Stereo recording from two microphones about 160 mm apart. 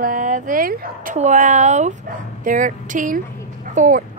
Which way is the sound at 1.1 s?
50° right (ahead or behind).